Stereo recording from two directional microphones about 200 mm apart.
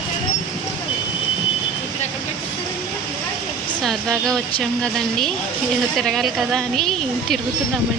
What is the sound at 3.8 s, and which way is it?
A woman's voice, centre (ahead or behind).